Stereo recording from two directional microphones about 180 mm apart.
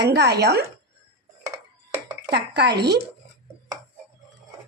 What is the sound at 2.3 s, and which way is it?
Speech, 70° right (ahead or behind).